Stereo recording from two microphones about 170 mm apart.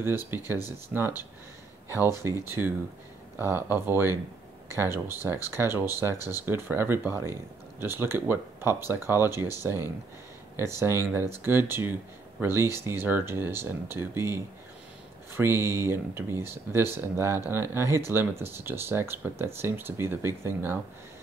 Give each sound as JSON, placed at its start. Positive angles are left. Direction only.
{"t": 0.0, "sound": "speech", "side_deg": -15}